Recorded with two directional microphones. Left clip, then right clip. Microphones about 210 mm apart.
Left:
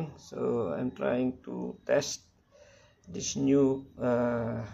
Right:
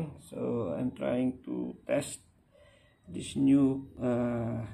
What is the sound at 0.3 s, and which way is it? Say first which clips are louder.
Speech: left 3 dB; 10° left (ahead or behind).